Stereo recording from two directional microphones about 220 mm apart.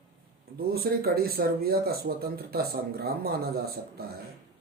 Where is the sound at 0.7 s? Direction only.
45° right (ahead or behind).